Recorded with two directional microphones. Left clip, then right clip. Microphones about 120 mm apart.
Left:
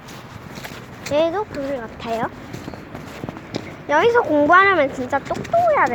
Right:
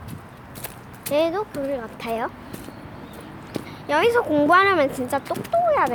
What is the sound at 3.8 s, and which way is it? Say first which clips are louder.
Speech: left 3 dB; 10° left (ahead or behind).